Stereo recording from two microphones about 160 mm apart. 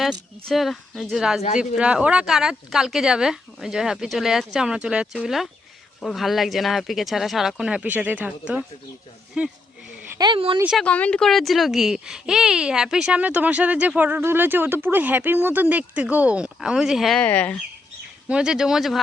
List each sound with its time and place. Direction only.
0.1 s speech: centre (ahead or behind)
10.2 s speech: 30° right (ahead or behind)
10.6 s speech: 5° right (ahead or behind)
10.8 s speech: 10° left (ahead or behind)
18.3 s speech: 5° right (ahead or behind)